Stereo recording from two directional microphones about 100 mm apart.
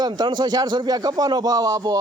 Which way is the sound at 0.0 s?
45° right (ahead or behind).